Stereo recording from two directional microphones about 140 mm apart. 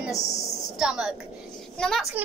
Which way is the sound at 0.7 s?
5° right (ahead or behind).